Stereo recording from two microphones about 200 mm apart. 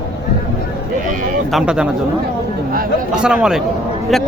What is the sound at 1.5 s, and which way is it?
Speech, 5° right (ahead or behind).